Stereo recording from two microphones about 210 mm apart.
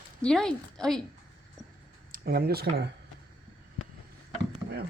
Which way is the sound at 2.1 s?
45° right (ahead or behind).